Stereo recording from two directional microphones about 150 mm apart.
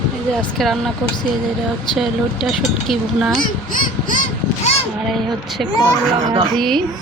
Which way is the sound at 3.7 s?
65° left (ahead or behind).